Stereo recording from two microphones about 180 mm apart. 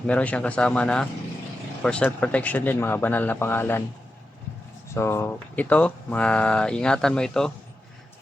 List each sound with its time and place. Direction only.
0.1 s speech: 5° left (ahead or behind)
4.9 s speech: 15° left (ahead or behind)